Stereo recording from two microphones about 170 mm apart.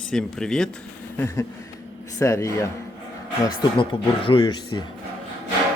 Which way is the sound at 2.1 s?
20° left (ahead or behind).